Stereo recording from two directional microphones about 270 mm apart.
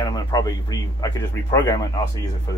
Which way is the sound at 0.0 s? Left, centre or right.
Centre.